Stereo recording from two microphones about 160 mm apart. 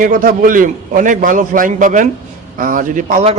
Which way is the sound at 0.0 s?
60° right (ahead or behind).